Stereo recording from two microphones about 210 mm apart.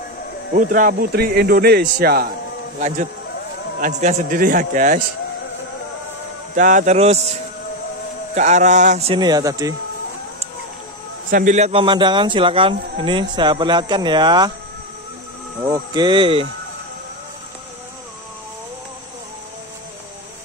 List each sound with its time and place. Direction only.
0.6 s a man's voice: 40° right (ahead or behind)
3.8 s a man's voice: 35° right (ahead or behind)
6.5 s a man's voice: 35° right (ahead or behind)
8.4 s speech: 35° right (ahead or behind); by 9.8 s 15° right (ahead or behind)
11.2 s speech: 40° right (ahead or behind); by 14.5 s 20° right (ahead or behind)
15.6 s speech: 20° right (ahead or behind)